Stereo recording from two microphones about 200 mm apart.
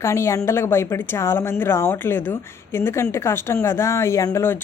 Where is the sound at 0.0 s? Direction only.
15° left (ahead or behind).